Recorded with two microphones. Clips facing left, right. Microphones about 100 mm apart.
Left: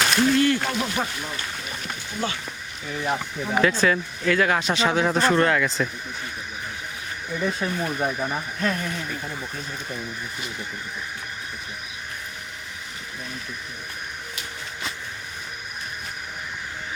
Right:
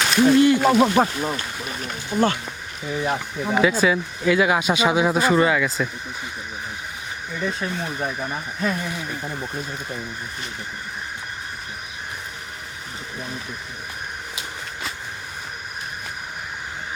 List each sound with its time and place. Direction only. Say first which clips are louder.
0.2 s speech: right 6 dB; 15° right (ahead or behind)
0.6 s speech: right 10 dB; 50° right (ahead or behind)
2.9 s speech: right 2 dB; 10° right (ahead or behind)
7.3 s speech: left 1 dB; 10° left (ahead or behind)
8.6 s speech: right 2 dB; 10° right (ahead or behind)